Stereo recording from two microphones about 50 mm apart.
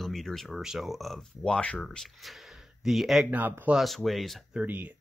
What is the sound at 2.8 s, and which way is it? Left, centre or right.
Speech, centre.